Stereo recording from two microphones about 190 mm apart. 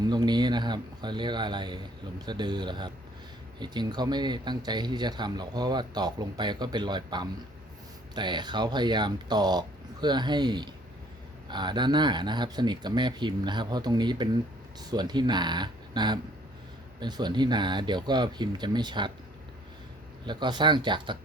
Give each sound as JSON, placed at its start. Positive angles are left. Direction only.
{"t": 0.1, "sound": "speech", "side_deg": -20}
{"t": 20.2, "sound": "speech", "side_deg": -25}